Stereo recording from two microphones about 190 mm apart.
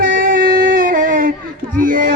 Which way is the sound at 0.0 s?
50° right (ahead or behind).